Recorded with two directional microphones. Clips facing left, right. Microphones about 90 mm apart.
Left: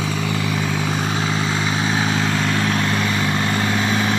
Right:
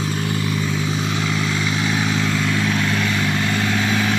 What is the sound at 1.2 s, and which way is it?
Vehicle, 35° left (ahead or behind).